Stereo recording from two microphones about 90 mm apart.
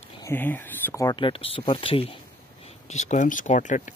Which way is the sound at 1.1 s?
80° left.